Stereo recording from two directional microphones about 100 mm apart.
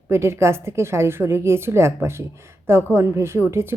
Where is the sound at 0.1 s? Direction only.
25° right (ahead or behind).